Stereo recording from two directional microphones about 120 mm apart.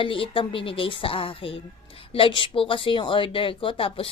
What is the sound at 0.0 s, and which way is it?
A woman's voice, 45° left (ahead or behind).